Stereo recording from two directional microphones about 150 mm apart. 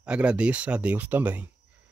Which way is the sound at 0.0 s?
5° right (ahead or behind).